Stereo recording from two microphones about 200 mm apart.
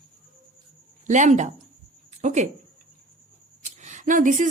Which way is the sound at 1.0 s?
40° right (ahead or behind).